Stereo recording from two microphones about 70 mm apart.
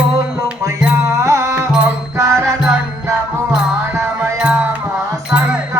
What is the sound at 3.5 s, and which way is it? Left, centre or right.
Music, centre.